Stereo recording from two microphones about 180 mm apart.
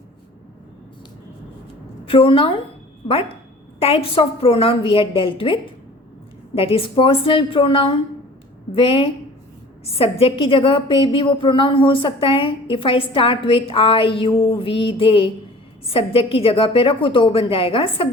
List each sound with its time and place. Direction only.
2.0 s a woman's voice: 30° left (ahead or behind)